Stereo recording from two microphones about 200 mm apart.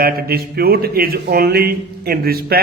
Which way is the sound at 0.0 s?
50° right (ahead or behind).